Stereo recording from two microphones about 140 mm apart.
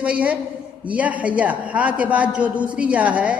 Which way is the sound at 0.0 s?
10° right (ahead or behind).